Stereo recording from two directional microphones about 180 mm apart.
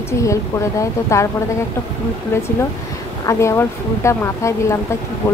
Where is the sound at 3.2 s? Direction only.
15° left (ahead or behind).